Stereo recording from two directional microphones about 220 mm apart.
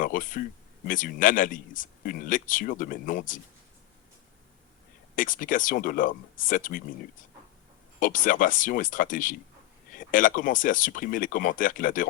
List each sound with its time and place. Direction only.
0.0 s speech: 40° left (ahead or behind)
5.1 s speech: 35° left (ahead or behind)
7.9 s speech: 35° left (ahead or behind)